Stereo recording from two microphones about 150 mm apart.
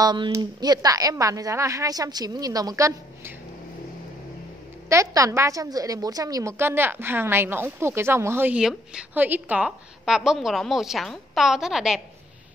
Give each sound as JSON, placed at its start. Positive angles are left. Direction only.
{"t": 0.0, "sound": "a woman's voice", "side_deg": -30}
{"t": 4.8, "sound": "a woman's voice", "side_deg": -20}